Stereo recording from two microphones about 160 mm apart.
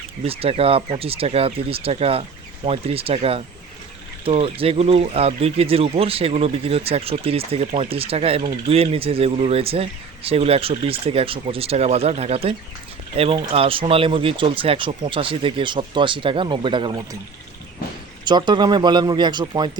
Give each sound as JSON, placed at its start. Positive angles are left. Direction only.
{"t": 0.3, "sound": "speech", "side_deg": -35}
{"t": 18.3, "sound": "speech", "side_deg": -30}